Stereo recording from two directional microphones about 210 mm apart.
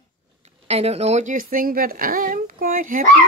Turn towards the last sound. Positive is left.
turn(degrees=-40)  # may be behind; listen again after turning